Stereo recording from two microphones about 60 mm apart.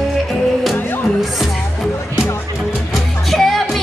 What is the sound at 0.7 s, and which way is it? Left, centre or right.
Music, left.